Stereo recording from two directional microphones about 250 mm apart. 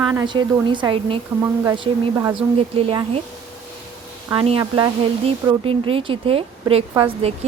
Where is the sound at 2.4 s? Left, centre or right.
Centre.